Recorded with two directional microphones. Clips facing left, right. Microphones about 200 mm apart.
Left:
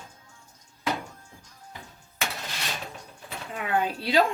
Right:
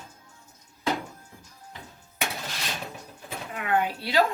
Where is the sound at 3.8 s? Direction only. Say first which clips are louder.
Left 3 dB; 25° left (ahead or behind).